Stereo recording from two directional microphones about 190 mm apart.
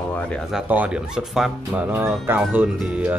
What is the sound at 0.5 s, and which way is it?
Speech, 5° right (ahead or behind).